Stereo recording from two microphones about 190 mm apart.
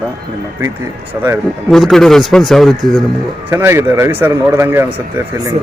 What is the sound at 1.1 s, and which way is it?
Speech, 15° right (ahead or behind).